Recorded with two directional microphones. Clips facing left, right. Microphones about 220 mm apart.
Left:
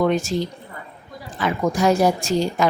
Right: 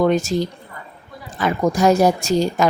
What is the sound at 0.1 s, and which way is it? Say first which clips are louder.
Speech: right 3 dB; 40° right (ahead or behind).